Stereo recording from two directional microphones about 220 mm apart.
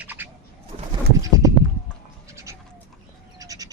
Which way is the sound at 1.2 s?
15° right (ahead or behind).